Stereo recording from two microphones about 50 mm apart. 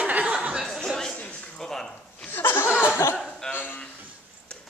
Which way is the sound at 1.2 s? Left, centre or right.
Left.